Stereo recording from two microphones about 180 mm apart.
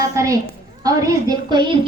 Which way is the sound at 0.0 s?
20° right (ahead or behind).